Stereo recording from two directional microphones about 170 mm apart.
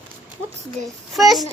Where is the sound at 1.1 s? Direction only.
Centre (ahead or behind).